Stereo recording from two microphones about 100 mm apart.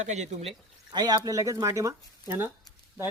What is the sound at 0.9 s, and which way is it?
Speech, 45° right (ahead or behind).